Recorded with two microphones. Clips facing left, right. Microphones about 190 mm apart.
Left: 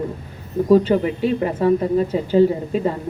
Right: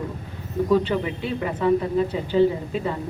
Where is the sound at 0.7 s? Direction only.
40° left (ahead or behind).